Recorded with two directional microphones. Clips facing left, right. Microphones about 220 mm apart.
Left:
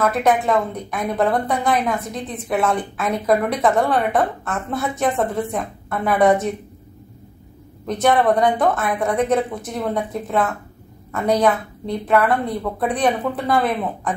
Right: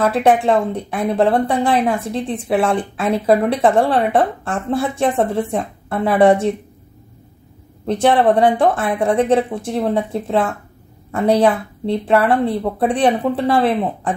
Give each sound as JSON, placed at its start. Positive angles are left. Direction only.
{"t": 0.0, "sound": "a woman's voice", "side_deg": -30}
{"t": 7.8, "sound": "a woman's voice", "side_deg": -30}